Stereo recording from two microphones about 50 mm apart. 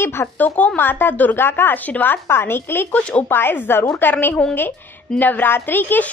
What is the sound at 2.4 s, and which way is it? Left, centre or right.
Speech, left.